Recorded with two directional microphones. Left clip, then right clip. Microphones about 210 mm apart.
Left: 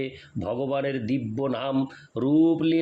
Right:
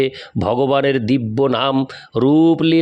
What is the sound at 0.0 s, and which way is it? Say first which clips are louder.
A man's voice: right 13 dB; 50° right (ahead or behind).